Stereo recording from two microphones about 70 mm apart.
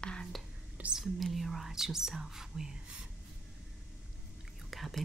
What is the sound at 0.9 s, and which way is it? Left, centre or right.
Whispering, centre.